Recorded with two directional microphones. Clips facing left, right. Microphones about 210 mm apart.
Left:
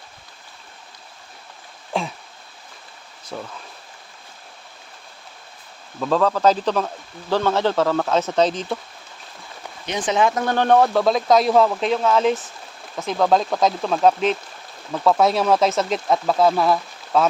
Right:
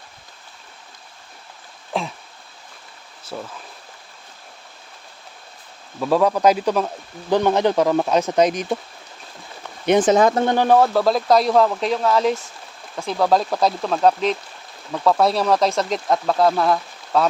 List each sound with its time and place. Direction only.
1.9 s a sound: centre (ahead or behind)
3.3 s speech: 5° right (ahead or behind)
6.0 s speech: 10° right (ahead or behind)
9.8 s speech: 55° right (ahead or behind)
10.4 s speech: 20° right (ahead or behind)
10.7 s speech: centre (ahead or behind)